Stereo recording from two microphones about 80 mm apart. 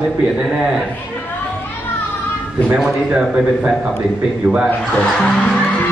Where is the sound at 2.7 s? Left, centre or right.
Centre.